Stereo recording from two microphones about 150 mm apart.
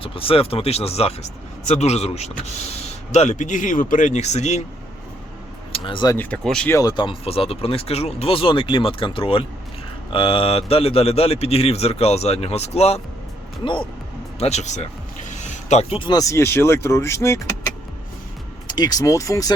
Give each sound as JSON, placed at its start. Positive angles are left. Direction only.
{"t": 0.0, "sound": "a man's voice", "side_deg": 40}
{"t": 5.7, "sound": "speech", "side_deg": 35}
{"t": 6.1, "sound": "speech", "side_deg": 15}
{"t": 6.7, "sound": "a man's voice", "side_deg": 25}
{"t": 14.3, "sound": "speech", "side_deg": 45}
{"t": 18.7, "sound": "speech", "side_deg": 25}